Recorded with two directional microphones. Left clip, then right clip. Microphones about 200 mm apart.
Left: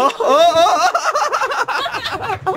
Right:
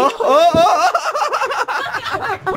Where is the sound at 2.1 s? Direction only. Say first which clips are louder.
Even; 10° left (ahead or behind).